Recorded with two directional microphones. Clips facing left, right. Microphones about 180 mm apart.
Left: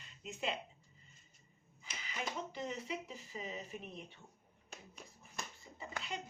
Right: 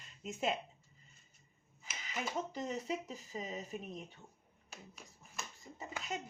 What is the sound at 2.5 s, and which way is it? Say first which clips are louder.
Speech: right 3 dB; 40° right (ahead or behind).